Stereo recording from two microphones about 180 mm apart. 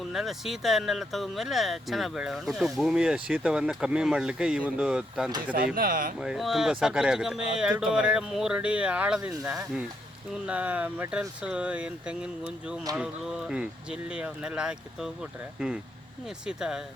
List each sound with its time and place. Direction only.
0.1 s speech: centre (ahead or behind)
5.7 s speech: 50° right (ahead or behind)
6.1 s speech: 5° right (ahead or behind)